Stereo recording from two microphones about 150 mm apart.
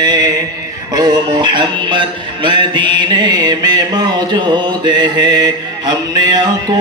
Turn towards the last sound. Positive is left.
turn(degrees=-25)  # may be behind; listen again after turning